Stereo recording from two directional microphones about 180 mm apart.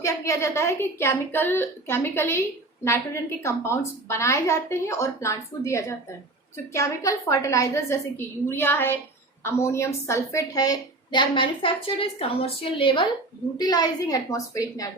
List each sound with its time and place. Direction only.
0.0 s a woman's voice: 15° left (ahead or behind)
3.4 s a woman's voice: 15° left (ahead or behind)